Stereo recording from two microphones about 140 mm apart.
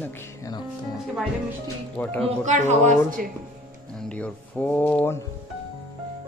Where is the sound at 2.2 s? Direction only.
55° right (ahead or behind).